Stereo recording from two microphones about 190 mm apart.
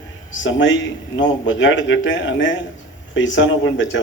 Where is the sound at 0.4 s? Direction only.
75° left (ahead or behind).